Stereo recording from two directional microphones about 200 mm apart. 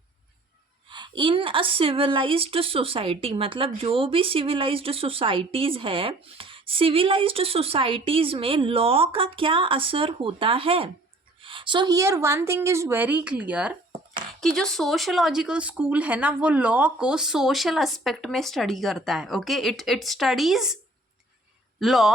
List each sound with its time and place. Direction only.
0.9 s a woman's voice: 25° right (ahead or behind); by 20.7 s centre (ahead or behind)
21.8 s speech: centre (ahead or behind)